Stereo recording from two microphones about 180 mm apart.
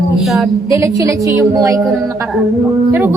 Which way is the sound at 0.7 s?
15° right (ahead or behind).